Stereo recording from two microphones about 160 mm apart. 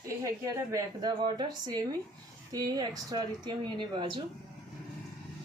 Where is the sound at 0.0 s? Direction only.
20° right (ahead or behind).